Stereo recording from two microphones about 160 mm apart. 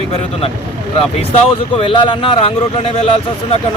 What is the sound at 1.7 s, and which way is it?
Speech, 35° left (ahead or behind).